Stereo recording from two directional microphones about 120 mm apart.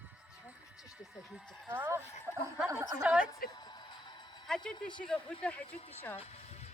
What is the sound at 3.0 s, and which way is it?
Speech, 10° right (ahead or behind).